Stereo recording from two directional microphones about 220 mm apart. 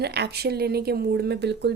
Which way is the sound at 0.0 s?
50° right (ahead or behind).